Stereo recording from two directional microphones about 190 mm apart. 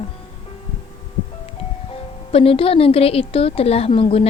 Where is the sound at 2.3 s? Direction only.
30° left (ahead or behind).